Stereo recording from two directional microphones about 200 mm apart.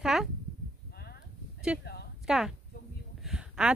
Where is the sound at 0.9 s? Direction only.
50° left (ahead or behind).